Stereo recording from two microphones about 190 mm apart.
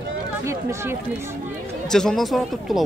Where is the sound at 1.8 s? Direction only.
5° left (ahead or behind).